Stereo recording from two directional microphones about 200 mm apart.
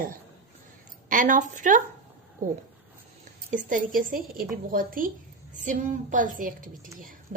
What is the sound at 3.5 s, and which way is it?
A woman's voice, 40° right (ahead or behind).